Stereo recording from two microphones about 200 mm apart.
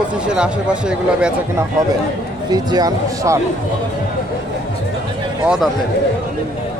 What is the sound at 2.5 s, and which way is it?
Speech, 20° right (ahead or behind).